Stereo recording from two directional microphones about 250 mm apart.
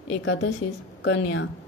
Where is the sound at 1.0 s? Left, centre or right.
Left.